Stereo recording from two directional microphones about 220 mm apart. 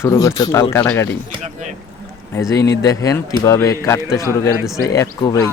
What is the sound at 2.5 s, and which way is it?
Speech, 15° left (ahead or behind).